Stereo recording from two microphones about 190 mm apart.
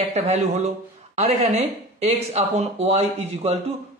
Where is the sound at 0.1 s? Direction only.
35° right (ahead or behind).